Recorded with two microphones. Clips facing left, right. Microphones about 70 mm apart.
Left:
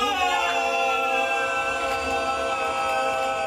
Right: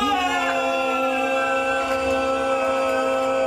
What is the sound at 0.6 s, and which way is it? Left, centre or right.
Music, right.